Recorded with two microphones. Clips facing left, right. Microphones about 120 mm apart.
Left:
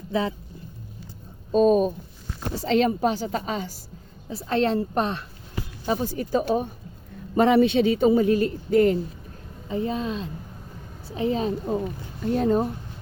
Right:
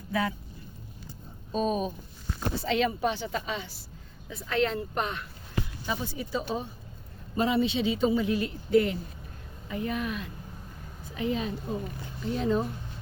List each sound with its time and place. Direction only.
0.1 s speech: 25° left (ahead or behind)
1.5 s a man's voice: 45° left (ahead or behind)
7.3 s a man's voice: 65° left (ahead or behind); by 9.0 s 45° left (ahead or behind)
9.6 s a man's voice: 30° left (ahead or behind); by 12.7 s 45° left (ahead or behind)